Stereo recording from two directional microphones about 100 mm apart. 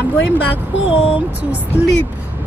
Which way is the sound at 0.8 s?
15° right (ahead or behind).